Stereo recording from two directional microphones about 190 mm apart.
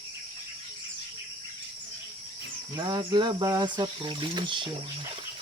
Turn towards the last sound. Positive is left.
turn(degrees=-25)  # may be behind; listen again after turning